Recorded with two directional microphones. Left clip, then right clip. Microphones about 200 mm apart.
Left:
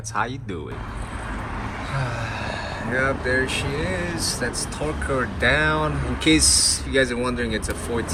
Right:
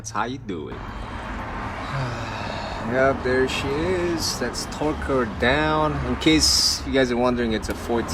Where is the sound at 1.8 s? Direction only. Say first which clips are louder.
Left 1 dB; 10° right (ahead or behind).